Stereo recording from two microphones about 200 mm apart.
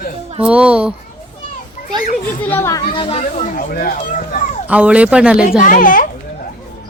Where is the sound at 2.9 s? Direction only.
25° left (ahead or behind).